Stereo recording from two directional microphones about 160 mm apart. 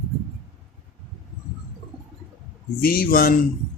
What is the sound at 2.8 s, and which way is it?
Speech, 70° left (ahead or behind).